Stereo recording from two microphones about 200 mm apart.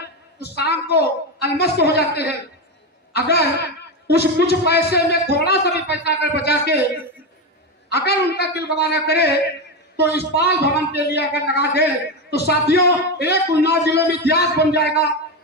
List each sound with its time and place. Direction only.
0.5 s a man's voice: 55° left (ahead or behind)
7.9 s a man's voice: 55° left (ahead or behind)